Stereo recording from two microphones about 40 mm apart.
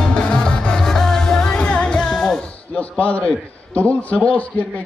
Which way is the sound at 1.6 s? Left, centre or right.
Left.